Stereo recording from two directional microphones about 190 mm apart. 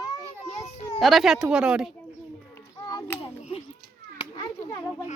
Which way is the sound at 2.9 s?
20° left (ahead or behind).